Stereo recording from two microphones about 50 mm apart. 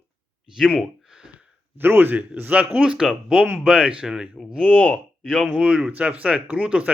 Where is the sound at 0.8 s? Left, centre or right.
Centre.